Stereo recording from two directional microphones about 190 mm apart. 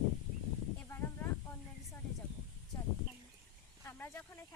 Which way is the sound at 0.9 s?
15° left (ahead or behind).